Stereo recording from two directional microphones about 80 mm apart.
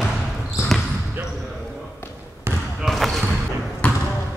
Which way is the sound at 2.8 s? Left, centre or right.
Centre.